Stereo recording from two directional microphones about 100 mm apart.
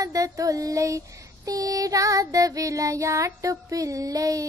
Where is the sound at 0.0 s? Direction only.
35° right (ahead or behind).